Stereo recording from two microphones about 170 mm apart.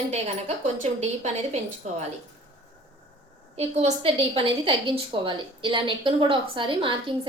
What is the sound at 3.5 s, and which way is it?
A woman's voice, 35° right (ahead or behind).